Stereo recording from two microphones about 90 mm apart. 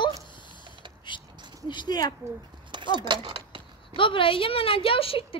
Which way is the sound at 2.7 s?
60° right (ahead or behind).